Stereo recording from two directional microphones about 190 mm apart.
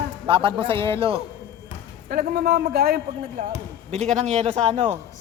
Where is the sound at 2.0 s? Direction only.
50° right (ahead or behind).